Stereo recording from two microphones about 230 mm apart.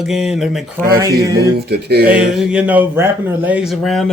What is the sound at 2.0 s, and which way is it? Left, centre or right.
Speech, centre.